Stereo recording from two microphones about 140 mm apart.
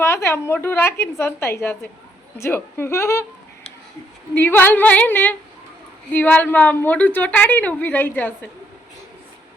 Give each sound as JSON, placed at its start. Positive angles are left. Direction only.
{"t": 0.0, "sound": "a woman's voice", "side_deg": 20}
{"t": 4.4, "sound": "a woman's voice", "side_deg": 15}